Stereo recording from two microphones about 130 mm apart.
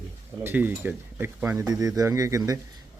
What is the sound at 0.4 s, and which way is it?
Speech, 15° right (ahead or behind).